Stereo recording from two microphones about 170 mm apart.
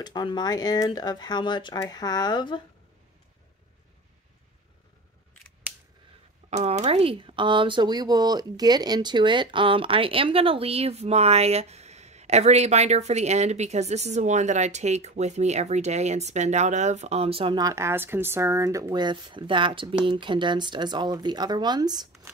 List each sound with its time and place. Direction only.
0.0 s speech: 25° left (ahead or behind)
6.5 s speech: 40° right (ahead or behind); by 22.0 s 25° right (ahead or behind)